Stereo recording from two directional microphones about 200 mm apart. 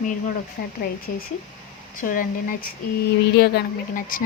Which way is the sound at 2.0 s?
45° left (ahead or behind).